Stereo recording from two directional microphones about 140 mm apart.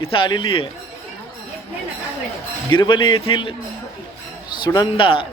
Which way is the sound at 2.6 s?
35° left (ahead or behind).